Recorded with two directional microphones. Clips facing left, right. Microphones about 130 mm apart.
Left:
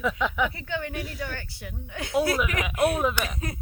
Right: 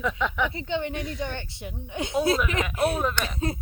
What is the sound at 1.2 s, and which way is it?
Speech, 20° right (ahead or behind).